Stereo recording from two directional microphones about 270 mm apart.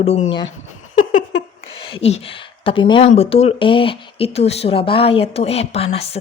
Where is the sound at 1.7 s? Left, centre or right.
Centre.